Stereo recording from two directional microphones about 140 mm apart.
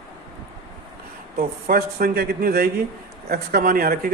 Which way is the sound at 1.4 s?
90° right.